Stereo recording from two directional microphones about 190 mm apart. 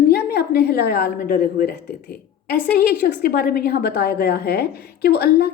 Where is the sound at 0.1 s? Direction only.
55° left (ahead or behind).